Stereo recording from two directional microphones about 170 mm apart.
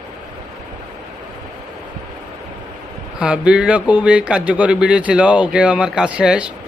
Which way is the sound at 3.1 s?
5° right (ahead or behind).